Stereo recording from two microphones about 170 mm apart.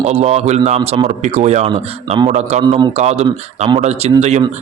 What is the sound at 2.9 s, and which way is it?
Speech, 40° right (ahead or behind).